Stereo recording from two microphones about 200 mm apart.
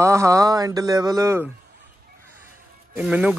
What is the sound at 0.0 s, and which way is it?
Speech, 15° right (ahead or behind).